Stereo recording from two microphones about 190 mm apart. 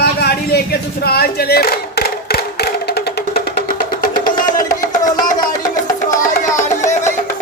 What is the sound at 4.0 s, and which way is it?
Music, 45° left (ahead or behind).